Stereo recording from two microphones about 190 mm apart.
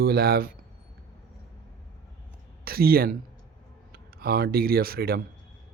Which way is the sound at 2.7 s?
50° right (ahead or behind).